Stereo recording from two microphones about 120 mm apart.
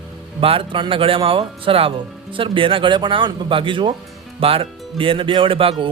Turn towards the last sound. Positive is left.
turn(degrees=-50)  # may be behind; listen again after turning